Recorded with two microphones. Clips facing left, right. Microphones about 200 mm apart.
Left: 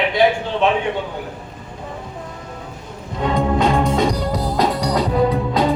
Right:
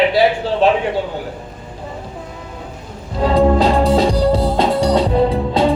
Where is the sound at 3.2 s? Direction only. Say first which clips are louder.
Right 5 dB; 35° right (ahead or behind).